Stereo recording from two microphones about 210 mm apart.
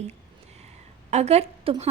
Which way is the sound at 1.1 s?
30° right (ahead or behind).